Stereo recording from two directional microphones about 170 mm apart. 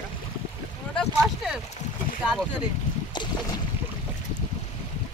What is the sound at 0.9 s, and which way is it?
Boat, centre (ahead or behind).